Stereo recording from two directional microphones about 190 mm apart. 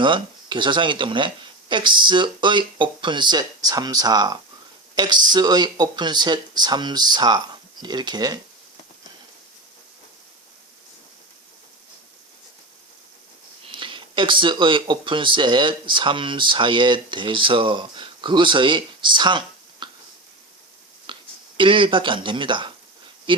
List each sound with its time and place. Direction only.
0.0 s speech: 25° right (ahead or behind)
13.7 s speech: 25° right (ahead or behind)
21.1 s a sound: 25° right (ahead or behind)
21.6 s speech: 25° right (ahead or behind)